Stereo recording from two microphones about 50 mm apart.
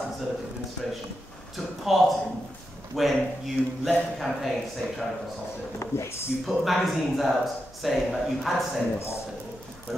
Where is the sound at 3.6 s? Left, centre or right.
Right.